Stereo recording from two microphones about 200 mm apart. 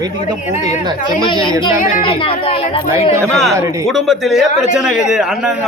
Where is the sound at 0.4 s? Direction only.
35° left (ahead or behind).